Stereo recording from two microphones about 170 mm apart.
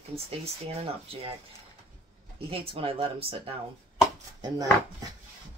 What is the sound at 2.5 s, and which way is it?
Speech, 35° right (ahead or behind).